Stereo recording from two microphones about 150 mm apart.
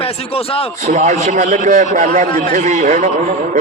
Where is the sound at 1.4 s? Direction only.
60° right (ahead or behind).